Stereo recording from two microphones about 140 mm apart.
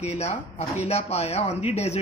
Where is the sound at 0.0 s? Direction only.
50° left (ahead or behind).